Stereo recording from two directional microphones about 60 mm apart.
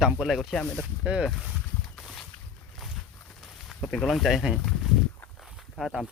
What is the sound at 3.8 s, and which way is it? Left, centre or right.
Speech, centre.